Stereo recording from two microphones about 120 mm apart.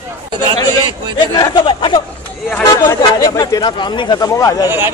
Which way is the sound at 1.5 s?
45° left (ahead or behind).